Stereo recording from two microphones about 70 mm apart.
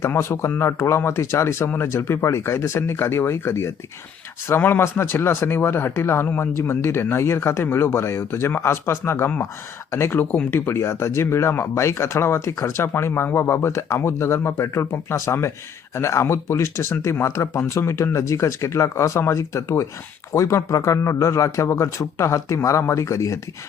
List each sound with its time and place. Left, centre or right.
0.1 s speech: left